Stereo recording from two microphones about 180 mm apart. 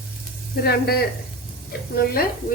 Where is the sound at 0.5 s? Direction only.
60° left (ahead or behind).